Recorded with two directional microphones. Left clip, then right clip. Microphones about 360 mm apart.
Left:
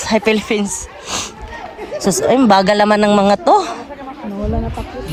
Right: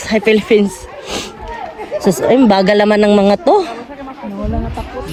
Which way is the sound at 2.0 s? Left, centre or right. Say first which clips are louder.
Right 2 dB; left.